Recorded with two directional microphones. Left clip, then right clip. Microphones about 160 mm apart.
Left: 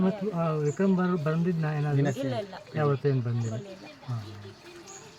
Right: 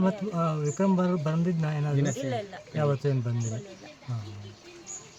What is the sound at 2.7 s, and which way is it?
Speech, 40° right (ahead or behind).